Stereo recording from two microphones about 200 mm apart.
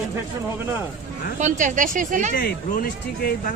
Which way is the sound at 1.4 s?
40° right (ahead or behind).